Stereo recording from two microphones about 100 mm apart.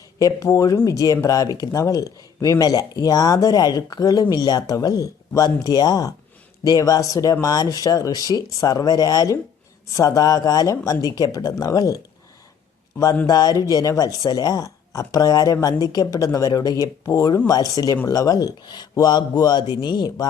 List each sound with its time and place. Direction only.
0.2 s speech: 35° left (ahead or behind)
13.2 s speech: 40° left (ahead or behind)